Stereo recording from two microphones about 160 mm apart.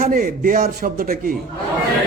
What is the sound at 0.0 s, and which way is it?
A man's voice, 65° right (ahead or behind).